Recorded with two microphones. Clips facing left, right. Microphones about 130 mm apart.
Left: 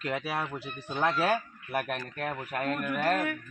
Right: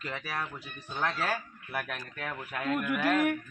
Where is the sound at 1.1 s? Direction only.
60° left (ahead or behind).